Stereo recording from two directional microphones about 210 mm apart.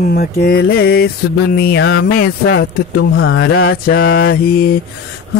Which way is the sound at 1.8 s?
65° left (ahead or behind).